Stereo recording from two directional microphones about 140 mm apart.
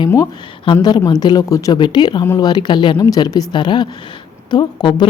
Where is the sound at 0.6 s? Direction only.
35° left (ahead or behind).